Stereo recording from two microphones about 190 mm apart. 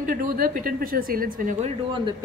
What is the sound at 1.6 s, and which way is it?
Speech, 25° right (ahead or behind).